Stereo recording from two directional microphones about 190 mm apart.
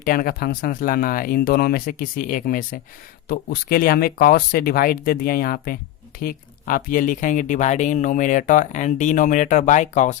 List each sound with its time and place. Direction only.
0.0 s speech: 50° left (ahead or behind)